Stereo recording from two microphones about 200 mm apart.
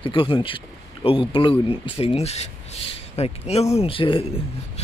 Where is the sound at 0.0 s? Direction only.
25° left (ahead or behind).